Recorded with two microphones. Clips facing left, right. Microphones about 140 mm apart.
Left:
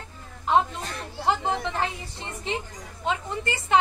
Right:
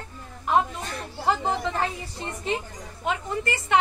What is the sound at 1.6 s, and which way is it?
A woman's voice, 20° left (ahead or behind).